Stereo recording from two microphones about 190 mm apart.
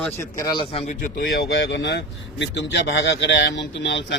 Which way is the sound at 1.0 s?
50° left (ahead or behind).